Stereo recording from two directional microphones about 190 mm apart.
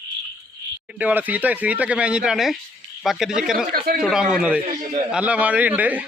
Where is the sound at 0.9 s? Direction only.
10° right (ahead or behind).